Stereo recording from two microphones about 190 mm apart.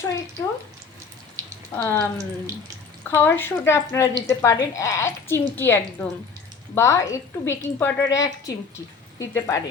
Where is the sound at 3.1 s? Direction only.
10° left (ahead or behind).